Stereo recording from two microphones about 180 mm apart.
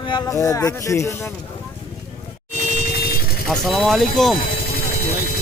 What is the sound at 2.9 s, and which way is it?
Vehicle, 60° left (ahead or behind).